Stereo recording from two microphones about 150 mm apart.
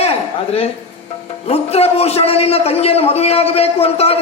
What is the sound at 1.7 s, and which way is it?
A man's voice, 45° left (ahead or behind).